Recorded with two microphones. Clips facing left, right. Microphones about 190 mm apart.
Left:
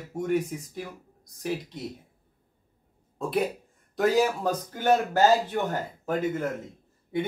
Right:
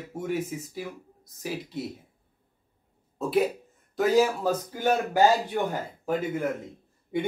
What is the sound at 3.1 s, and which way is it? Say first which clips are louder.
A man's voice: right 3 dB; 5° right (ahead or behind).